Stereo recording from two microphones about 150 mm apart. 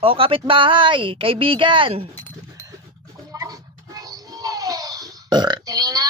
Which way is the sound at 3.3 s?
20° right (ahead or behind).